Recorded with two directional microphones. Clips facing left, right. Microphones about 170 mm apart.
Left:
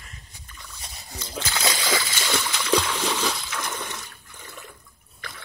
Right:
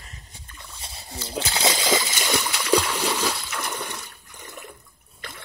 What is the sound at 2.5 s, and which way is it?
Splash, 10° right (ahead or behind).